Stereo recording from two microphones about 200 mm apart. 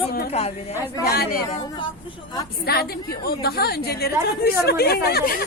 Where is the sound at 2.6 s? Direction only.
50° left (ahead or behind).